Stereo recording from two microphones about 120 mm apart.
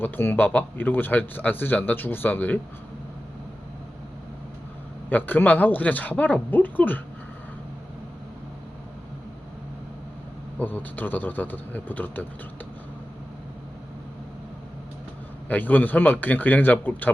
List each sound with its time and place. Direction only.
0.0 s speech: 15° left (ahead or behind)
5.0 s speech: 15° left (ahead or behind)
10.6 s speech: 15° left (ahead or behind)
15.4 s speech: 15° left (ahead or behind)